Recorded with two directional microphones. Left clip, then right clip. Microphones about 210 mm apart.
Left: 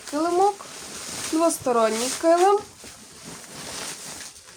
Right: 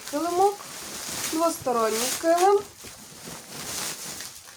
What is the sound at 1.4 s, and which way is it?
Speech, 45° left (ahead or behind).